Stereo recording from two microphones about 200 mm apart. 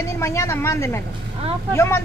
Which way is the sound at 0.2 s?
15° left (ahead or behind).